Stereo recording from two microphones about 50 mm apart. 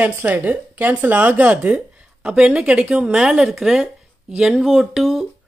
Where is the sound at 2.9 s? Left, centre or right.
Centre.